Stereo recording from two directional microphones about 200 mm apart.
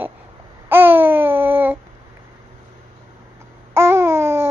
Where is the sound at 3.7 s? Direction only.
10° right (ahead or behind).